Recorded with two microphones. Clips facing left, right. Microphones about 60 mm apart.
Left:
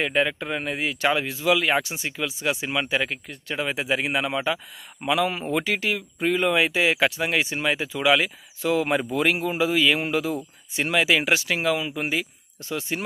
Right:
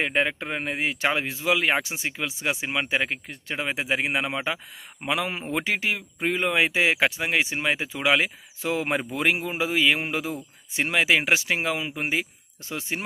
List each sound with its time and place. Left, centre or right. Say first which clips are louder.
0.0 s speech: left 1 dB; right